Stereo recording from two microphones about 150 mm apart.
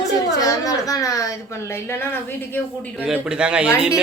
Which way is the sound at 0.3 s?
25° left (ahead or behind).